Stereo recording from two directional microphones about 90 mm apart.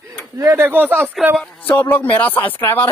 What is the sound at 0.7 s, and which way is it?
Speech, 20° right (ahead or behind).